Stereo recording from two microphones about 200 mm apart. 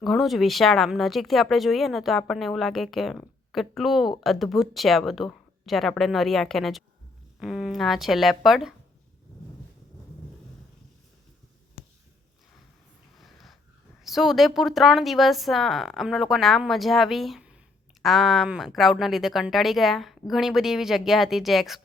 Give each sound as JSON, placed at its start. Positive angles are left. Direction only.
{"t": 0.0, "sound": "speech", "side_deg": 0}
{"t": 13.1, "sound": "snort", "side_deg": 0}
{"t": 14.0, "sound": "speech", "side_deg": 0}